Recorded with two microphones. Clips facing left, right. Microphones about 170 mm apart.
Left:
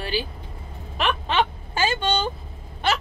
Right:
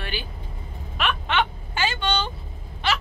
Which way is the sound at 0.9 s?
35° left (ahead or behind).